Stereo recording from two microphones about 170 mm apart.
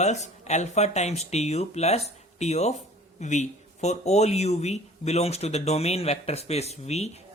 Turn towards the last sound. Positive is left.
turn(degrees=40)  # may be behind; listen again after turning